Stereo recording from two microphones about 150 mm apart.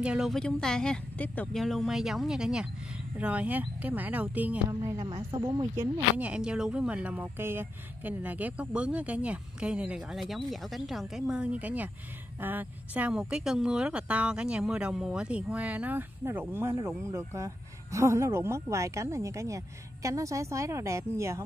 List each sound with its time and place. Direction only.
0.0 s speech: 5° right (ahead or behind)
4.8 s speech: 25° right (ahead or behind)
6.1 s speech: 10° right (ahead or behind)